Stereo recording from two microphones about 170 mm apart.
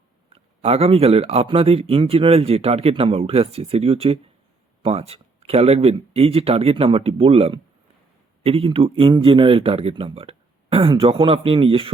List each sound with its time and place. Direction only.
0.3 s speech: 35° right (ahead or behind)